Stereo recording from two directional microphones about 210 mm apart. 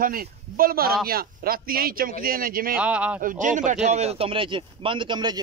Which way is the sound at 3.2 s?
40° right (ahead or behind).